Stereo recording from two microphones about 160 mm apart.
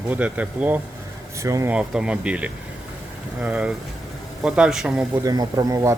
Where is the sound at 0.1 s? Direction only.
10° right (ahead or behind).